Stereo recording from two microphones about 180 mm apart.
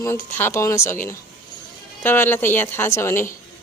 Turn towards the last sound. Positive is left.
turn(degrees=15)  # may be behind; listen again after turning